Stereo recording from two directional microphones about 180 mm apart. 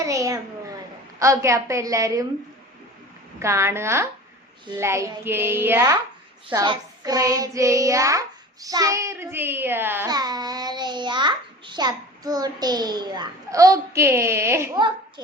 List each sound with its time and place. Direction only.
0.0 s a child's voice: 20° right (ahead or behind)
3.4 s a child's voice: 15° right (ahead or behind)
10.1 s a child's voice: 20° right (ahead or behind)